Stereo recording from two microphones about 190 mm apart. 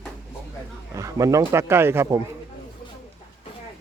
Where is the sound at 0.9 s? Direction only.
15° right (ahead or behind).